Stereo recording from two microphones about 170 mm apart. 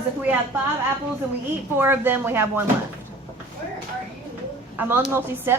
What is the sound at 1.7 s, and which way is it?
Speech, 10° right (ahead or behind).